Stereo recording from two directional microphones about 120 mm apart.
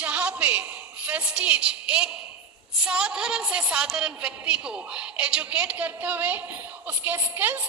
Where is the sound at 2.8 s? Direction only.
5° right (ahead or behind).